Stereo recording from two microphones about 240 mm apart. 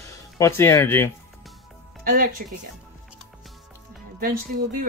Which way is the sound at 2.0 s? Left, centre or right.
Right.